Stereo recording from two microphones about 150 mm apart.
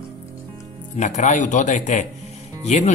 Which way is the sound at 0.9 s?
50° left (ahead or behind).